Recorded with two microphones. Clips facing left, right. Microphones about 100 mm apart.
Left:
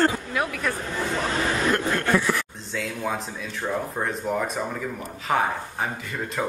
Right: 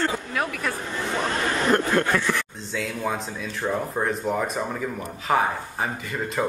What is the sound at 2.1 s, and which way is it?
A man's voice, 10° left (ahead or behind).